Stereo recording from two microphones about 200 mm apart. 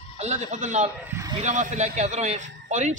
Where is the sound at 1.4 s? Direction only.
35° right (ahead or behind).